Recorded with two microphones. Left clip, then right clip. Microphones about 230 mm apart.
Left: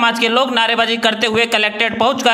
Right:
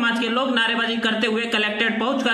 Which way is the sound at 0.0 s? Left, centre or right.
Left.